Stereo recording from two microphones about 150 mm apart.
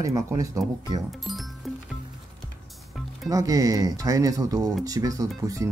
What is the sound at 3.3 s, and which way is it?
Speech, 25° right (ahead or behind).